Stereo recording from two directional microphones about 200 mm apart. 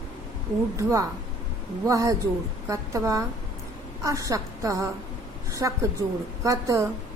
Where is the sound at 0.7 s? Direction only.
15° right (ahead or behind).